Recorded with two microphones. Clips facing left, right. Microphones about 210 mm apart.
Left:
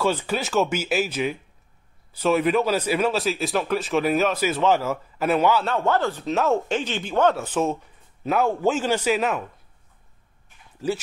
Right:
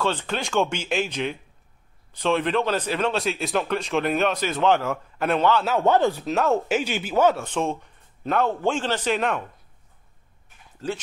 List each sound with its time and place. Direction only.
0.0 s a man's voice: 10° left (ahead or behind)
5.9 s speech: 15° right (ahead or behind)
6.2 s speech: centre (ahead or behind)
7.3 s a man's voice: 5° left (ahead or behind)